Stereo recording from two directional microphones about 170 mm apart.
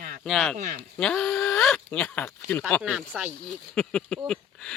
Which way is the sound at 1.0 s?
5° left (ahead or behind).